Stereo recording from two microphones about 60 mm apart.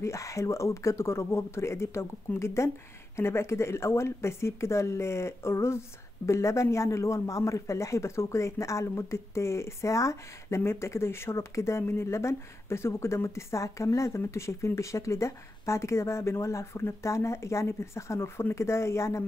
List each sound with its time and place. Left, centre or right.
0.0 s speech: left
10.6 s speech: left